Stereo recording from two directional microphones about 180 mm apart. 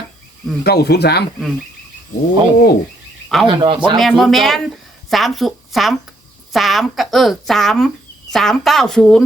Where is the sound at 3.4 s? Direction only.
25° right (ahead or behind).